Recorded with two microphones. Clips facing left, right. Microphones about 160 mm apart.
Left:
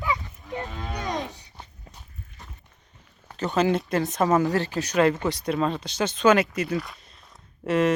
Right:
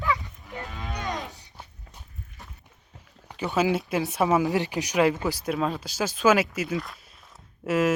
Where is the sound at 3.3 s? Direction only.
10° right (ahead or behind).